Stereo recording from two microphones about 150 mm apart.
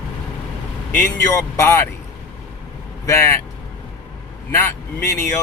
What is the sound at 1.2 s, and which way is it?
Speech, 20° left (ahead or behind).